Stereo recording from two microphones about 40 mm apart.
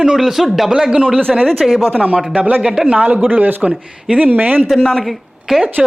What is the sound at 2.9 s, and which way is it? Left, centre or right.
Speech, right.